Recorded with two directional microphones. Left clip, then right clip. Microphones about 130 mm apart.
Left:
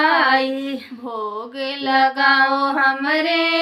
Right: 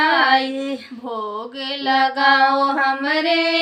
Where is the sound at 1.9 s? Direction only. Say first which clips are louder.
Even; 10° right (ahead or behind).